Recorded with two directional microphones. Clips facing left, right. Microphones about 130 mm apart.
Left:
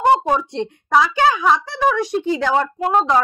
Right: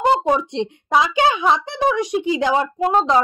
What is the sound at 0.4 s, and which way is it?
A woman's voice, 20° right (ahead or behind).